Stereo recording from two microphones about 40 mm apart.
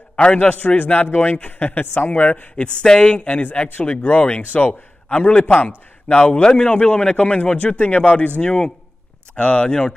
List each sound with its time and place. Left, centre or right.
0.1 s a man's voice: left
2.5 s a man's voice: left
3.5 s a man's voice: left
3.8 s a man's voice: left
5.6 s a man's voice: left
6.1 s a man's voice: left